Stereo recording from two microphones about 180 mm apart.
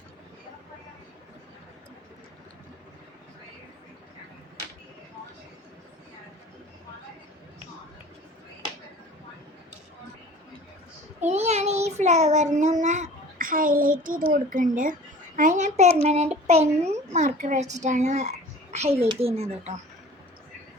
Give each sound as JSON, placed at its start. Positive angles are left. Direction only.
{"t": 11.2, "sound": "child singing", "side_deg": -40}
{"t": 12.8, "sound": "a child's voice", "side_deg": -40}